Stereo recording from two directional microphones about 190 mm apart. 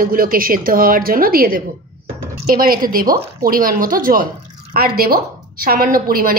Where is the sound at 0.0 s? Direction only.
50° right (ahead or behind).